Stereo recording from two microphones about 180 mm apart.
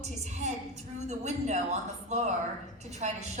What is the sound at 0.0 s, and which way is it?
A woman's voice, 40° right (ahead or behind).